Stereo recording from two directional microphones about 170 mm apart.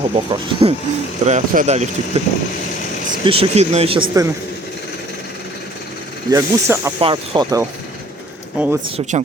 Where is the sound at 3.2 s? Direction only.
35° right (ahead or behind).